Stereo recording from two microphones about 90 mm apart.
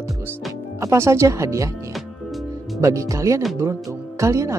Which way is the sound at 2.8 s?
35° right (ahead or behind).